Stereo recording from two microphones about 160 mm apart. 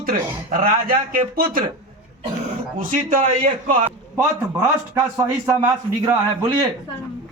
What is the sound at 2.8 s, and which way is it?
A man's voice, 55° right (ahead or behind).